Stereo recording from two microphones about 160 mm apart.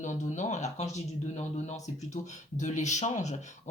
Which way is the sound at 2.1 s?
50° left (ahead or behind).